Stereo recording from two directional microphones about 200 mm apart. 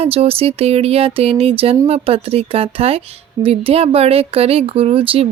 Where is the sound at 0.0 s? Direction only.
30° right (ahead or behind).